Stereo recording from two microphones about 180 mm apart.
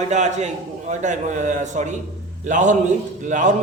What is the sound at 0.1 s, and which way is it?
A man's voice, 40° right (ahead or behind).